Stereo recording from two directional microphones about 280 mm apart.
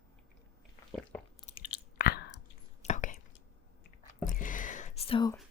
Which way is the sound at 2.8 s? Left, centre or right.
Left.